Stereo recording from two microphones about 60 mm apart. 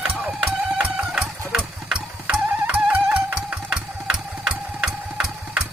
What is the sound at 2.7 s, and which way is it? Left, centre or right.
Music, right.